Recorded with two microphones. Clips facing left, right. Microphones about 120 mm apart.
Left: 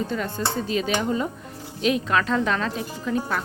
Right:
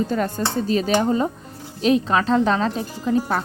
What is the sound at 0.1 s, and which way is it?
A woman's voice, 40° right (ahead or behind).